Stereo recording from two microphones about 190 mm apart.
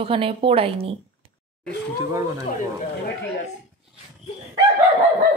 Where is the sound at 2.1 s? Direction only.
20° right (ahead or behind).